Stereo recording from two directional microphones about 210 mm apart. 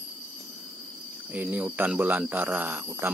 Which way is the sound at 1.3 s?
10° right (ahead or behind).